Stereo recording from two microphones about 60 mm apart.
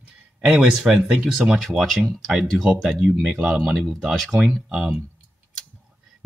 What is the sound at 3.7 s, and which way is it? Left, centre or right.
Speech, centre.